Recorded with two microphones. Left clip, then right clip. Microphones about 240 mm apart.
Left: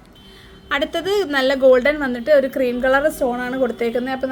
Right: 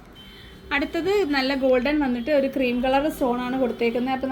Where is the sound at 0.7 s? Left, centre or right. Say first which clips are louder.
Left 3 dB; left.